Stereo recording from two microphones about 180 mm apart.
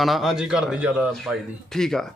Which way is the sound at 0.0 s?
Centre (ahead or behind).